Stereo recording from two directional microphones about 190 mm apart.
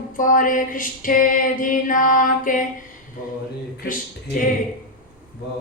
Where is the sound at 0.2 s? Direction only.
45° left (ahead or behind).